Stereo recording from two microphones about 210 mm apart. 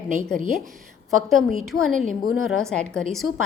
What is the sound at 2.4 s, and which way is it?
Speech, 5° left (ahead or behind).